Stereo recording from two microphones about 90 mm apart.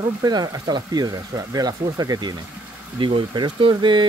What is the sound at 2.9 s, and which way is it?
Speech, 65° right (ahead or behind).